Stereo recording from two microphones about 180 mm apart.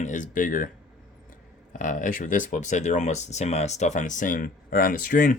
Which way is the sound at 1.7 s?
50° left (ahead or behind).